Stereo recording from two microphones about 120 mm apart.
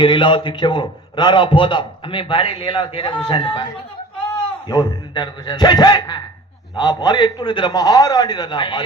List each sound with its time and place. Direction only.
0.0 s a man's voice: 40° left (ahead or behind)
5.1 s a man's voice: 40° left (ahead or behind)